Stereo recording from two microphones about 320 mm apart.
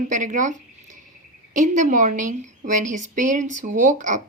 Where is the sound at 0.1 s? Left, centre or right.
Right.